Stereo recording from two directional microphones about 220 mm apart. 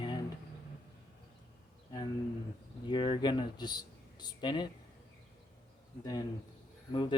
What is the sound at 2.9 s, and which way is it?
Speech, 20° left (ahead or behind).